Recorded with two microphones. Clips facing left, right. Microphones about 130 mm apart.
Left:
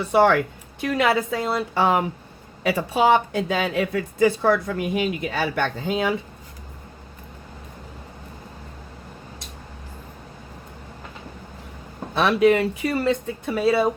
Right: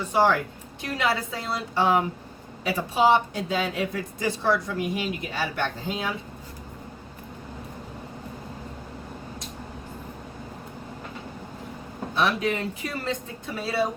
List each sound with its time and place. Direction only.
0.0 s speech: 65° left (ahead or behind)
0.8 s a woman's voice: 55° left (ahead or behind)
12.1 s speech: 70° left (ahead or behind)